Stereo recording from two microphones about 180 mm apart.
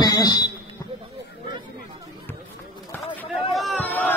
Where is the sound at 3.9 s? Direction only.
10° left (ahead or behind).